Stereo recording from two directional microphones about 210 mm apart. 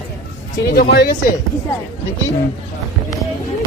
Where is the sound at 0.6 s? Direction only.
45° left (ahead or behind).